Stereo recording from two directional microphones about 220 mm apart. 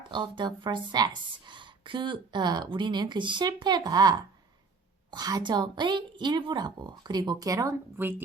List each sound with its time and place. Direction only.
0.1 s a woman's voice: 20° right (ahead or behind)